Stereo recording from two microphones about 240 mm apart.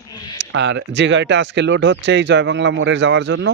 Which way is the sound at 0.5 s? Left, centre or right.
Right.